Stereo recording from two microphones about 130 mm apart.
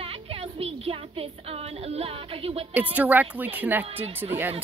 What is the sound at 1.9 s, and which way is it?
Speech, 50° right (ahead or behind).